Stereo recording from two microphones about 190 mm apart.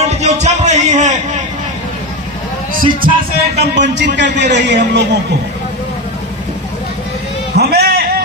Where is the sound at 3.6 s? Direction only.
65° right (ahead or behind).